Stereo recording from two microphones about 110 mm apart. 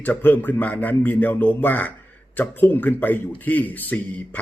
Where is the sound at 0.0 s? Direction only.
15° left (ahead or behind).